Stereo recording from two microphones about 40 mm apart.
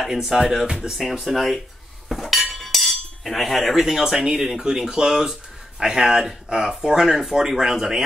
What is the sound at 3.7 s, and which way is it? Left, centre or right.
Speech, centre.